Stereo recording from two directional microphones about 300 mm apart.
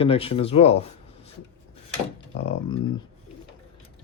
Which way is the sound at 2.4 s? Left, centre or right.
Centre.